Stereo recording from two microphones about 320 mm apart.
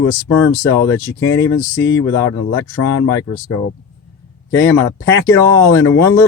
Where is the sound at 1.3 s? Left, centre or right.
Left.